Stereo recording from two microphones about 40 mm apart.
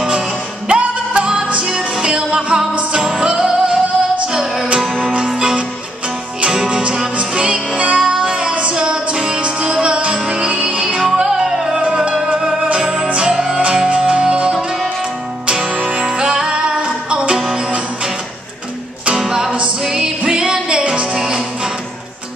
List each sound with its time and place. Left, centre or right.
0.7 s music: right
6.4 s music: right
11.8 s music: right
12.8 s music: centre
17.6 s music: right
19.1 s music: centre
21.1 s music: centre